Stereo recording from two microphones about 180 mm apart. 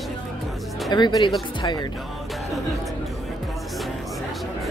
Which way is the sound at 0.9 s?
25° left (ahead or behind).